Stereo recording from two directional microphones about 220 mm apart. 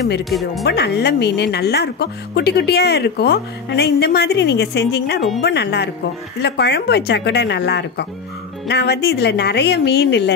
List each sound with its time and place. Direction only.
0.2 s speech: centre (ahead or behind)
0.7 s a woman's voice: 45° left (ahead or behind)